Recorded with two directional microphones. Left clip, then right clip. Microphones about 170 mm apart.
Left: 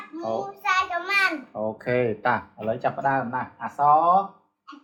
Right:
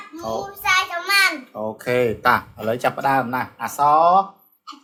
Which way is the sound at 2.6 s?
45° right (ahead or behind).